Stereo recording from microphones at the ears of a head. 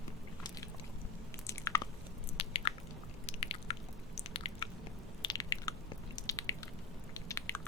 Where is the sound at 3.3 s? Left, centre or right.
Left.